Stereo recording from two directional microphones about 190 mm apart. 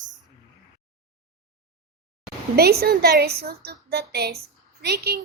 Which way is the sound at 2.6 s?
55° right (ahead or behind).